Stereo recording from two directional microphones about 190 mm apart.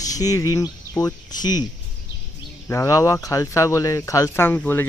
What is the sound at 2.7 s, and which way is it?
Speech, 15° left (ahead or behind).